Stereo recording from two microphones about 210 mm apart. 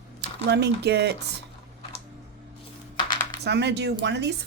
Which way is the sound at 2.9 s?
20° left (ahead or behind).